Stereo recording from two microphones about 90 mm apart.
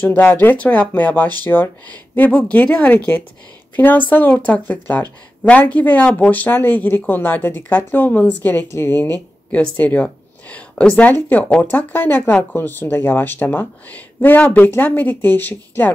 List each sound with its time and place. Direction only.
0.0 s speech: 15° left (ahead or behind)